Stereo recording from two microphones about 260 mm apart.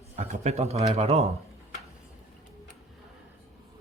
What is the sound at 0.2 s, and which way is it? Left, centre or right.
Speech, right.